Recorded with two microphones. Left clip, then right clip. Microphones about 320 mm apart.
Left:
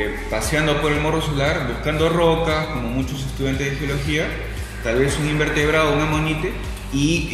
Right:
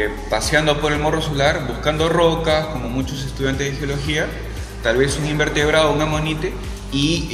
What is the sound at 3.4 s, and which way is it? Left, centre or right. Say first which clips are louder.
Speech: right 2 dB; right.